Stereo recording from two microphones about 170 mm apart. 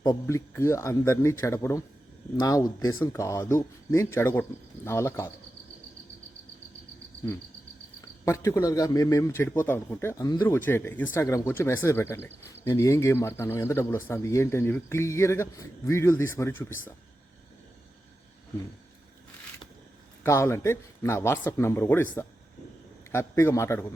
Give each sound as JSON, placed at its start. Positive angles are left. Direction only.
{"t": 0.0, "sound": "a man's voice", "side_deg": 20}
{"t": 8.2, "sound": "a man's voice", "side_deg": 15}
{"t": 20.2, "sound": "a man's voice", "side_deg": 15}